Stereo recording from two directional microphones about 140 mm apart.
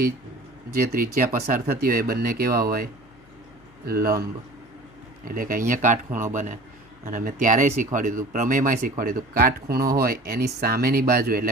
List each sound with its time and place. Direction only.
0.7 s a man's voice: 90° right; by 6.6 s 65° right (ahead or behind)
7.0 s speech: 80° right